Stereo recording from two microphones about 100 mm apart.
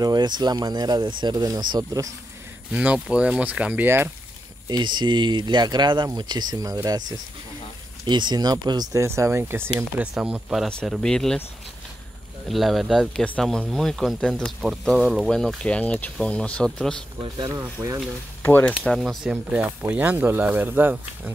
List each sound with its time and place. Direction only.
0.0 s speech: 45° right (ahead or behind)
2.7 s speech: 10° right (ahead or behind)
4.6 s speech: 45° right (ahead or behind)
9.0 s speech: 30° right (ahead or behind)
10.1 s speech: 5° right (ahead or behind)
11.0 s speech: 5° left (ahead or behind)
12.4 s speech: centre (ahead or behind)
17.5 s speech: 25° right (ahead or behind)
18.4 s speech: 15° left (ahead or behind)
18.9 s speech: 5° right (ahead or behind)
19.3 s speech: 20° right (ahead or behind)